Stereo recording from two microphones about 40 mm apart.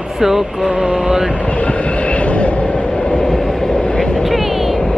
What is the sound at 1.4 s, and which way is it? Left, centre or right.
Train, left.